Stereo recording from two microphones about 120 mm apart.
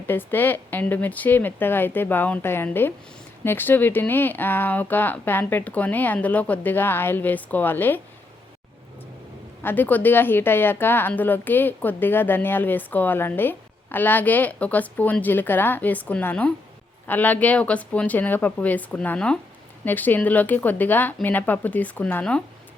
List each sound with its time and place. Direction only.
0.1 s a woman's voice: 15° left (ahead or behind)
9.6 s a woman's voice: 15° left (ahead or behind)